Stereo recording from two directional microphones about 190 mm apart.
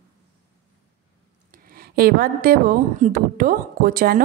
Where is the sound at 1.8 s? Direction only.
50° right (ahead or behind).